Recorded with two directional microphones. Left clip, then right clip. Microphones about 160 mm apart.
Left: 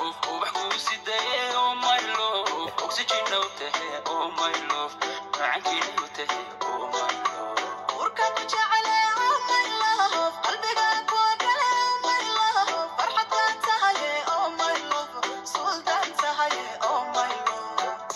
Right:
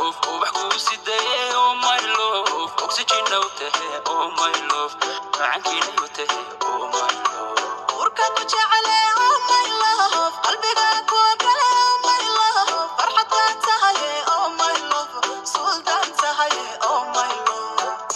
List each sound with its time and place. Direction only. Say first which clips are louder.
0.0 s music: right 7 dB; 20° right (ahead or behind)